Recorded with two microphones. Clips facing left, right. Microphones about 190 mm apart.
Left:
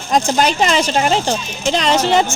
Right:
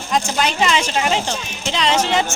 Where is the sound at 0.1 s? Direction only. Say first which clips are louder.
Left 5 dB; 40° left (ahead or behind).